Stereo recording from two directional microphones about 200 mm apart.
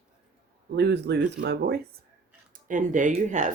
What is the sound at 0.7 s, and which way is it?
Speech, 55° right (ahead or behind).